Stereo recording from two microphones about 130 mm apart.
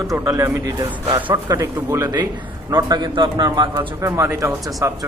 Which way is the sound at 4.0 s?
20° right (ahead or behind).